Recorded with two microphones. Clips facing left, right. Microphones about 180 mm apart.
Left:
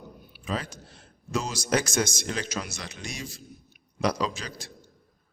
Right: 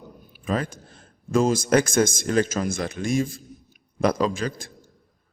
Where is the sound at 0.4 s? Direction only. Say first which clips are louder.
Right 6 dB; 50° right (ahead or behind).